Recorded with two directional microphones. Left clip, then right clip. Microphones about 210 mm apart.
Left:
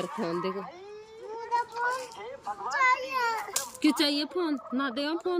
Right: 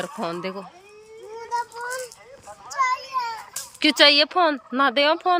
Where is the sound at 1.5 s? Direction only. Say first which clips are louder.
Right 1 dB; 60° right (ahead or behind).